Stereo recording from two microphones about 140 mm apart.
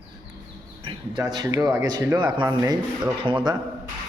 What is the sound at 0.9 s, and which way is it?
Speech, 30° right (ahead or behind).